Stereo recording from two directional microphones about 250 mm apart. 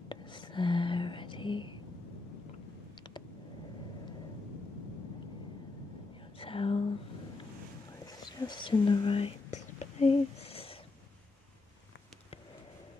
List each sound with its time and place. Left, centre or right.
0.1 s whispering: centre
6.3 s a sound: left
8.1 s whispering: centre